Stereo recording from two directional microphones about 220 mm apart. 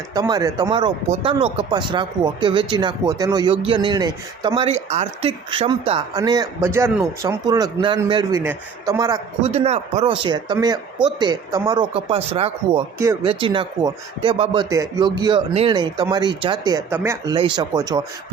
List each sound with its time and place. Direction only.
0.1 s speech: 15° right (ahead or behind)
9.4 s speech: 30° right (ahead or behind); by 17.3 s 10° right (ahead or behind)
17.3 s speech: 20° right (ahead or behind)